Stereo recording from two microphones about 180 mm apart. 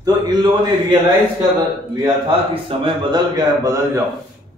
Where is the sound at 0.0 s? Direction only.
25° right (ahead or behind).